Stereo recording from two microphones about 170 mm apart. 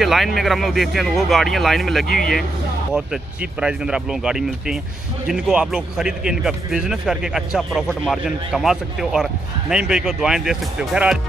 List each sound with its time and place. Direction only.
0.0 s speech: centre (ahead or behind)
3.6 s speech: 5° right (ahead or behind)